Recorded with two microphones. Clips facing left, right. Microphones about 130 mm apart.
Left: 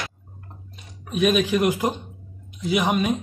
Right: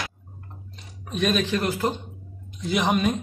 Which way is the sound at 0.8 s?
5° left (ahead or behind).